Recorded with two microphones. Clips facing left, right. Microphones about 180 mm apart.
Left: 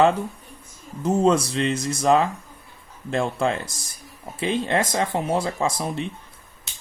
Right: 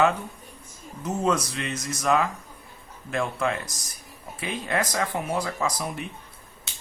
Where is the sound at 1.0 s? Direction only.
30° left (ahead or behind).